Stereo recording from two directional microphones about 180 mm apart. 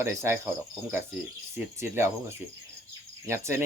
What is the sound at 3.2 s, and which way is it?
Cricket, 15° right (ahead or behind).